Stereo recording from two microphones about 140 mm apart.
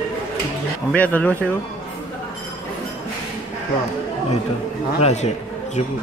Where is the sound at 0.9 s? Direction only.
10° left (ahead or behind).